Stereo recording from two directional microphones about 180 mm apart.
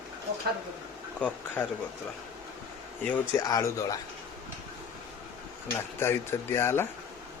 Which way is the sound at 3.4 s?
20° left (ahead or behind).